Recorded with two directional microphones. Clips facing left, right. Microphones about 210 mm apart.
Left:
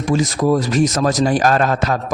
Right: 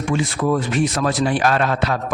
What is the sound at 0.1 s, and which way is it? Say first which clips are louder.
A man's voice: left 4 dB; 35° left (ahead or behind).